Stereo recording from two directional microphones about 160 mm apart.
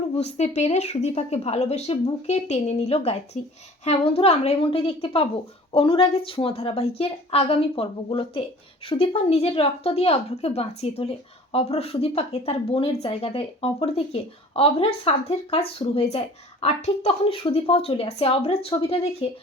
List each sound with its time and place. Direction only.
0.2 s a woman's voice: 45° left (ahead or behind)